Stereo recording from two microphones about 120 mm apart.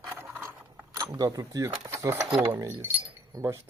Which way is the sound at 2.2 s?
10° right (ahead or behind).